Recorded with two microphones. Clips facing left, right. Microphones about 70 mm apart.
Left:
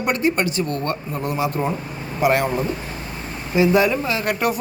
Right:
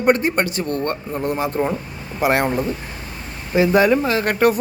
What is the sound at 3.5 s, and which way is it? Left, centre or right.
A man's voice, right.